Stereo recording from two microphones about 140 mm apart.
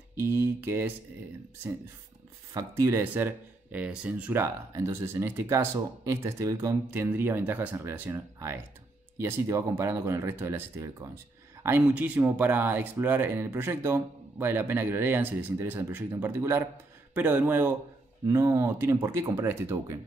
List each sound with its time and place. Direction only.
0.1 s speech: 20° right (ahead or behind)
2.5 s speech: 20° right (ahead or behind)